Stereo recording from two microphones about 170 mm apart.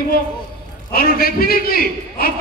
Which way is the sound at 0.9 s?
60° left (ahead or behind).